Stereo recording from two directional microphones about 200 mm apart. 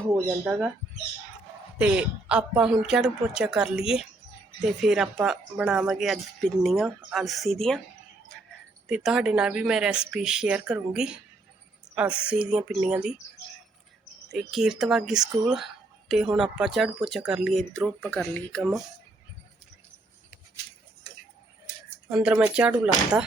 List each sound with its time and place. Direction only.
0.5 s speech: centre (ahead or behind)
1.8 s speech: 5° right (ahead or behind)
8.9 s speech: 5° right (ahead or behind)
14.3 s speech: centre (ahead or behind)
22.1 s speech: 5° right (ahead or behind)